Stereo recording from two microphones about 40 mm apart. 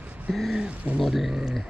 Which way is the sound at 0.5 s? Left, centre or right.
Right.